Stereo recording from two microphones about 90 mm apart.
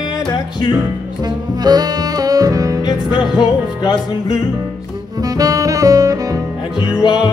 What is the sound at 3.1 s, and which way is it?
Music, 5° right (ahead or behind).